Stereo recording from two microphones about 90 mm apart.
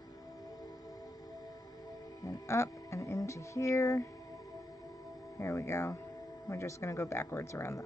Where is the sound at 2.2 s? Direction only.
35° left (ahead or behind).